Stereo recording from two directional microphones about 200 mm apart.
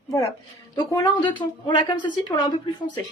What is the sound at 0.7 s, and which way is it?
A woman's voice, 20° left (ahead or behind).